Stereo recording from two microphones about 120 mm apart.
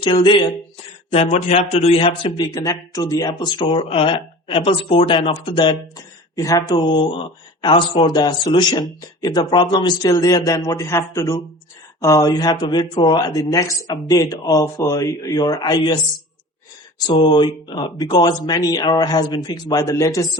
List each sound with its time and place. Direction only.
0.0 s speech: 40° left (ahead or behind)
1.1 s speech: 65° left (ahead or behind)
2.4 s speech: 30° left (ahead or behind)
3.8 s speech: 50° left (ahead or behind)
6.3 s speech: 30° left (ahead or behind)
6.7 s speech: 40° left (ahead or behind)
17.1 s speech: 40° left (ahead or behind)